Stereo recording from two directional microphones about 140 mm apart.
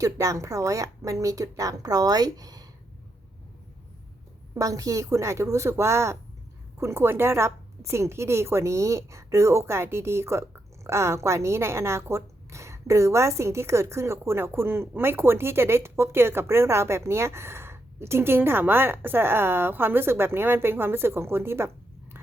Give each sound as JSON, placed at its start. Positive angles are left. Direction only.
{"t": 0.0, "sound": "a woman's voice", "side_deg": -25}
{"t": 4.5, "sound": "a woman's voice", "side_deg": -25}